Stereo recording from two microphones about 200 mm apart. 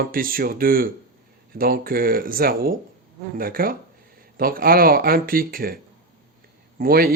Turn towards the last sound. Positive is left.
turn(degrees=-50)  # may be behind; listen again after turning